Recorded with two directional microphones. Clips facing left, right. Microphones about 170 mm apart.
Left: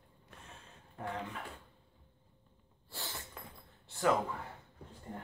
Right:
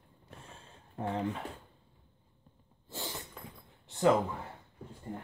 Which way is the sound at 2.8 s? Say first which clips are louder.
Right 5 dB; 20° right (ahead or behind).